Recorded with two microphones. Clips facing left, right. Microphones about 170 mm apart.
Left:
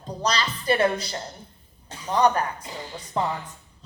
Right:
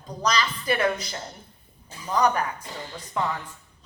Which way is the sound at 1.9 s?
75° left (ahead or behind).